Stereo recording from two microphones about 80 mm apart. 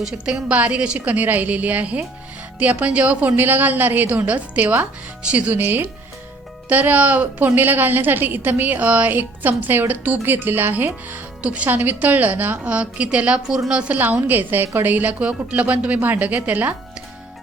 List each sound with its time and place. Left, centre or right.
0.0 s a woman's voice: centre